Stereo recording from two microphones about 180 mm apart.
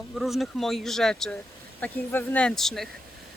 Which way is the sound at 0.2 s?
Centre (ahead or behind).